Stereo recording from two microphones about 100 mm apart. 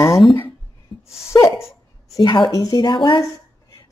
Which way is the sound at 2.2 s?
45° left (ahead or behind).